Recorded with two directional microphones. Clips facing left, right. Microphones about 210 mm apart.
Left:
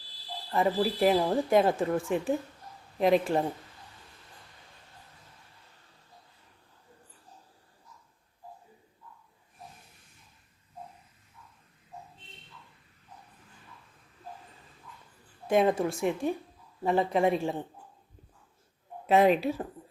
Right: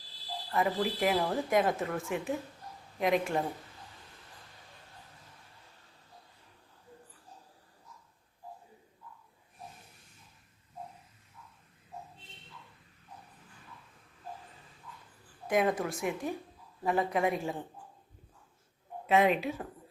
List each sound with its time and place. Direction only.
0.5 s speech: 30° left (ahead or behind)
15.4 s a woman's voice: 30° left (ahead or behind)
19.0 s speech: 35° left (ahead or behind)